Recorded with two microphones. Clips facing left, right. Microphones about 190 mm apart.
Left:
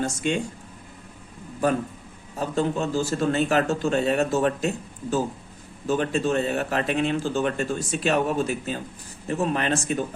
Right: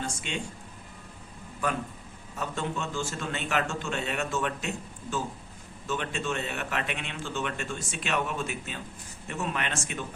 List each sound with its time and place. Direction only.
0.0 s speech: 45° left (ahead or behind)
2.3 s speech: 35° left (ahead or behind)
5.9 s speech: 35° left (ahead or behind)